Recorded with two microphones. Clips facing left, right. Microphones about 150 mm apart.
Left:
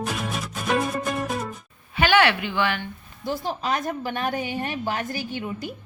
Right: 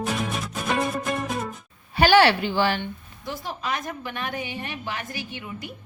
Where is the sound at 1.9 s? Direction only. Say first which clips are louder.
Right 3 dB; 35° right (ahead or behind).